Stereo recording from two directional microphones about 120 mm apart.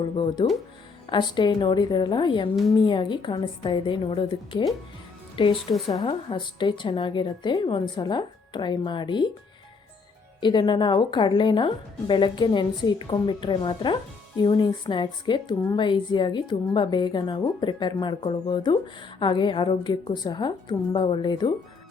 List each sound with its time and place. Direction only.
1.0 s a woman's voice: 40° left (ahead or behind)
10.4 s speech: 40° left (ahead or behind)